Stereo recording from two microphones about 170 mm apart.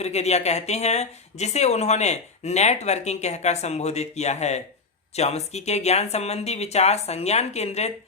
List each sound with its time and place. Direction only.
0.0 s speech: 40° left (ahead or behind)